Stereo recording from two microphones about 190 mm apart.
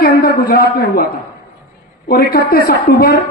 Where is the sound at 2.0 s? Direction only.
55° left (ahead or behind).